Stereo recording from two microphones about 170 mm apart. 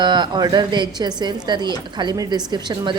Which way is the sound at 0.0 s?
25° right (ahead or behind).